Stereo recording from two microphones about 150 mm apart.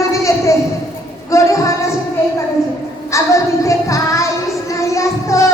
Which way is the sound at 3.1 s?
20° left (ahead or behind).